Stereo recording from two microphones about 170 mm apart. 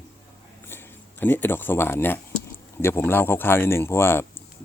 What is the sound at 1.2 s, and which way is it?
Speech, 10° left (ahead or behind).